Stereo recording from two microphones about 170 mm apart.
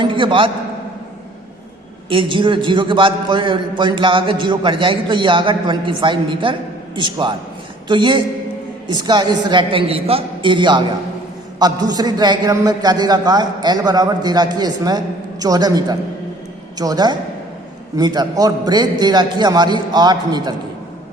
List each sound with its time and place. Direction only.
0.0 s a man's voice: 30° right (ahead or behind)
2.0 s a man's voice: 30° right (ahead or behind)